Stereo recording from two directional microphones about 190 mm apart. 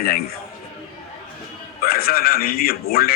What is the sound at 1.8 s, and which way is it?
A man's voice, 50° left (ahead or behind).